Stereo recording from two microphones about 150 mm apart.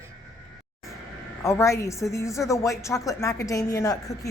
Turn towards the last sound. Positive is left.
turn(degrees=20)  # may be behind; listen again after turning